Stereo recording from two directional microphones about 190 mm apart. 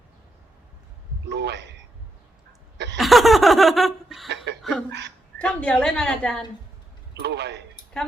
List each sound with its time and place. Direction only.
1.3 s a man's voice: 65° right (ahead or behind)
2.7 s a sound: 65° right (ahead or behind)
3.0 s laughter: centre (ahead or behind)
4.9 s a sound: 65° right (ahead or behind)
5.4 s a woman's voice: 5° left (ahead or behind)
7.2 s a man's voice: 60° right (ahead or behind)
7.9 s speech: 5° left (ahead or behind)